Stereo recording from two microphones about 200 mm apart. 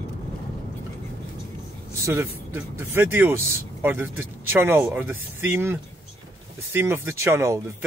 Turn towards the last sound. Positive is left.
turn(degrees=-15)  # may be behind; listen again after turning